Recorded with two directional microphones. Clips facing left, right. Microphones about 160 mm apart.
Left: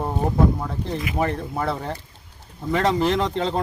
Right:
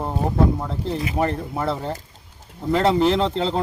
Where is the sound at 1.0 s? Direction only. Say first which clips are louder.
Right 1 dB; 30° right (ahead or behind).